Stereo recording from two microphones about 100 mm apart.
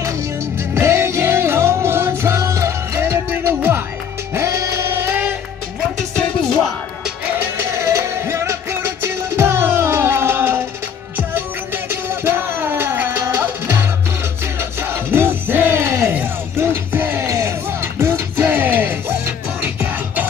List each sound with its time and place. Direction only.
0.6 s music: 30° right (ahead or behind)
7.3 s music: 25° right (ahead or behind)